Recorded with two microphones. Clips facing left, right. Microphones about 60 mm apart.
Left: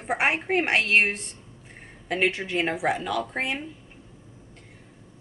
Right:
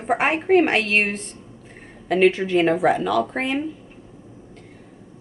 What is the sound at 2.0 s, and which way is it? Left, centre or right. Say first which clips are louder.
Speech: right 8 dB; centre.